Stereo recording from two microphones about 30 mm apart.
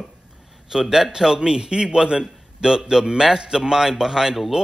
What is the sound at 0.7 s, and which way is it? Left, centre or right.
A man's voice, centre.